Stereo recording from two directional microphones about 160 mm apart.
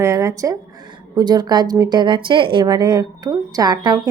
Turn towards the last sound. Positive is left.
turn(degrees=-25)  # may be behind; listen again after turning